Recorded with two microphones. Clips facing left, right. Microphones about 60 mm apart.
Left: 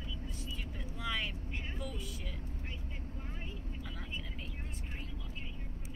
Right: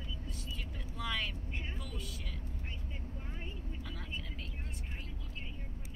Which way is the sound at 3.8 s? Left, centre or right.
Centre.